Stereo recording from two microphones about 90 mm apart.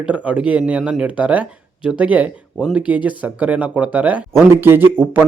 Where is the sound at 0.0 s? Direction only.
15° right (ahead or behind).